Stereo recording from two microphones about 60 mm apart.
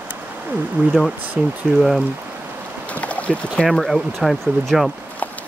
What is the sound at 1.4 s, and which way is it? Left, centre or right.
Speech, right.